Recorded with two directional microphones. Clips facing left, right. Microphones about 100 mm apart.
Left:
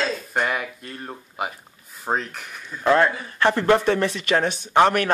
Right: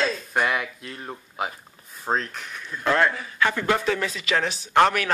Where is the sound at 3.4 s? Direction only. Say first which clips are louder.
Left 4 dB; 35° left (ahead or behind).